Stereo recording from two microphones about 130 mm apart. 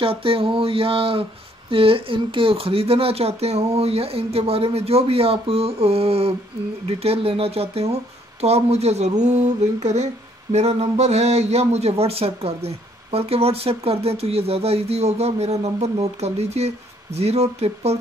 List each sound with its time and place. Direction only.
0.0 s speech: 45° right (ahead or behind)